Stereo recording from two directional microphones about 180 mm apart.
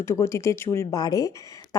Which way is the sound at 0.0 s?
15° left (ahead or behind).